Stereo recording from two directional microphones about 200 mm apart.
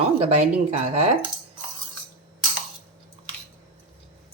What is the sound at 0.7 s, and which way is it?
Speech, 35° right (ahead or behind).